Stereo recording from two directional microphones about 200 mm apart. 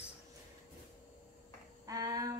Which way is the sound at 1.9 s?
15° right (ahead or behind).